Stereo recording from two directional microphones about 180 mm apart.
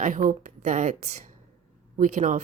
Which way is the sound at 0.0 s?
45° right (ahead or behind).